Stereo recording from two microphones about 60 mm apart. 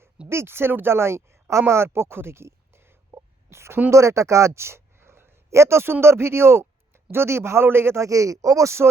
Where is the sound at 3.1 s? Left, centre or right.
Right.